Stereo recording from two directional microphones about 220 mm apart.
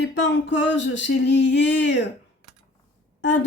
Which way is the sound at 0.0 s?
55° left (ahead or behind).